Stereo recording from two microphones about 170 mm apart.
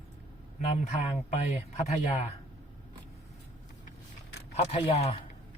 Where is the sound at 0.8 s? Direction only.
40° left (ahead or behind).